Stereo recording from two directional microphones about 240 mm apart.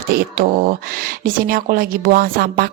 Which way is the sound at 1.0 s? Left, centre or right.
Right.